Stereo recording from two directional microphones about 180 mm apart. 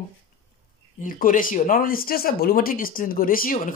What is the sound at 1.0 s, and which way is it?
Speech, 50° left (ahead or behind).